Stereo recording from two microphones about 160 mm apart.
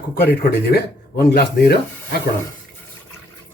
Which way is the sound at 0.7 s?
85° left.